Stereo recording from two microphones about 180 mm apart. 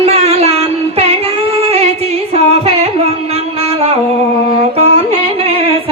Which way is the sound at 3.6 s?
35° right (ahead or behind).